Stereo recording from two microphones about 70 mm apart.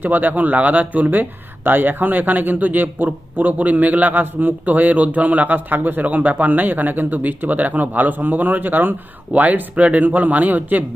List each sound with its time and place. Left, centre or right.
0.0 s speech: right